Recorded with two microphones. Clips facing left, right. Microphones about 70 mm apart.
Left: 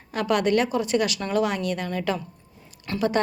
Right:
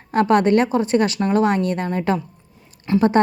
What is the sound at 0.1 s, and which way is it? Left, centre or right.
A woman's voice, right.